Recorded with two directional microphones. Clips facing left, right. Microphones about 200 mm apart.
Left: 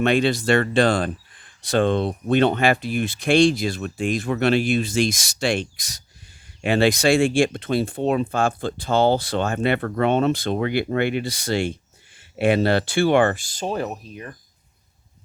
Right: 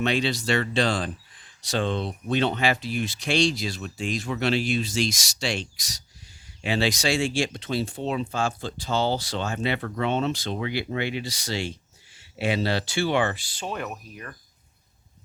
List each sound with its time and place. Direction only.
0.0 s speech: 55° left (ahead or behind); by 14.3 s 25° left (ahead or behind)